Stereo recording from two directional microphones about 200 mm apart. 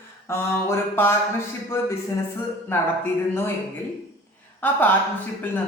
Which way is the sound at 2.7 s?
10° left (ahead or behind).